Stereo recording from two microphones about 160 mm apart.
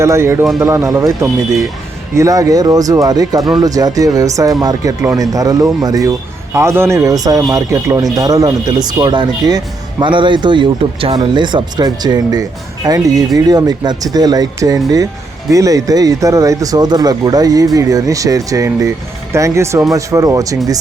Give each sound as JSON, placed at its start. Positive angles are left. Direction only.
{"t": 0.0, "sound": "speech", "side_deg": -15}